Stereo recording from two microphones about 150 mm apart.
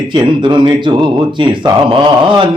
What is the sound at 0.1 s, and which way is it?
Speech, 30° right (ahead or behind).